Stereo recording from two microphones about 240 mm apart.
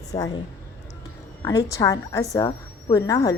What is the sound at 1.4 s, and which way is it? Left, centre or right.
A woman's voice, centre.